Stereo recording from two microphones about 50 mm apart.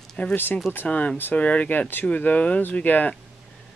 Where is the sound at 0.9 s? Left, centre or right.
Left.